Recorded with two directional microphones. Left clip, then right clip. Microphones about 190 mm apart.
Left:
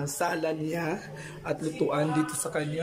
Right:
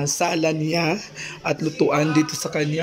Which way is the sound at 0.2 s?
5° right (ahead or behind).